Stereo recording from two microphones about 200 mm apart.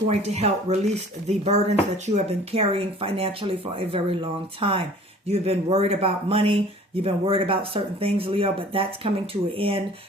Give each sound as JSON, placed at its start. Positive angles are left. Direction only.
{"t": 0.1, "sound": "speech", "side_deg": -35}